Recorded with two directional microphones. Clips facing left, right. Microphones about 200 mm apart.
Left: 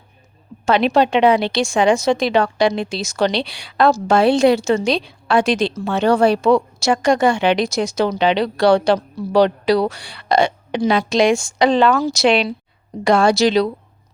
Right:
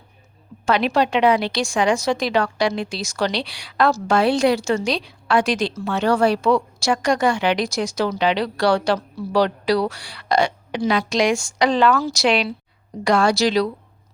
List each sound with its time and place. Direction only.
0.6 s a woman's voice: 25° left (ahead or behind)